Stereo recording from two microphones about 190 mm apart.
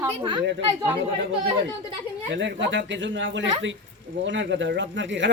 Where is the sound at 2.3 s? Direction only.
70° right (ahead or behind).